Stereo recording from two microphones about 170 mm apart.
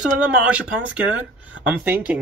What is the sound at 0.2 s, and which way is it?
Speech, 5° right (ahead or behind).